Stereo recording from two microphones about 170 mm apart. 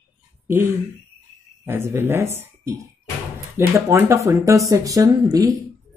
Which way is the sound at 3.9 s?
15° right (ahead or behind).